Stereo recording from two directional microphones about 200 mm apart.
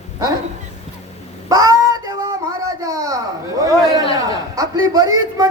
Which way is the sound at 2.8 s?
15° right (ahead or behind).